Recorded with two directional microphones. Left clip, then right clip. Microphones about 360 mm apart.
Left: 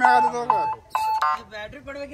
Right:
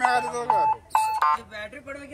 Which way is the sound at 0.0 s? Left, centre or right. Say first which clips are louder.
Left 6 dB; centre.